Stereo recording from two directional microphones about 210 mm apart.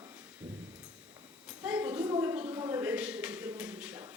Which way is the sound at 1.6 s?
5° right (ahead or behind).